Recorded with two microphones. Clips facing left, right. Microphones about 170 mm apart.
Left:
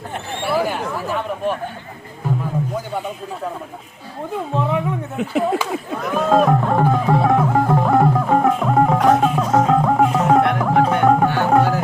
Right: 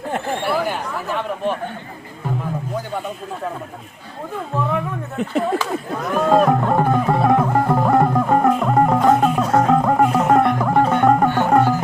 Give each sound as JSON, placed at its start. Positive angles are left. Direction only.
{"t": 0.4, "sound": "chatter", "side_deg": 0}
{"t": 5.1, "sound": "music", "side_deg": 0}